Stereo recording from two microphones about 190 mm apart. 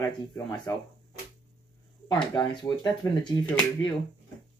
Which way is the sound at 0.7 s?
15° left (ahead or behind).